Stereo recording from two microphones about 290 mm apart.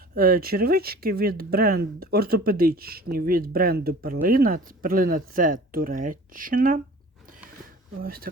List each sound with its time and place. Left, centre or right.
0.1 s speech: right
8.0 s speech: right